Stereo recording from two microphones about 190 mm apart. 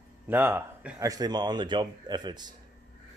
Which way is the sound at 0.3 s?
10° right (ahead or behind).